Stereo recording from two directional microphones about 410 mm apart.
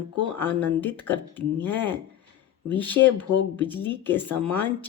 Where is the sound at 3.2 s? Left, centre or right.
Left.